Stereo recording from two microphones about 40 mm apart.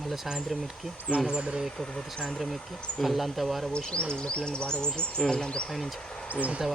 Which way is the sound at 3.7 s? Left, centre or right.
Centre.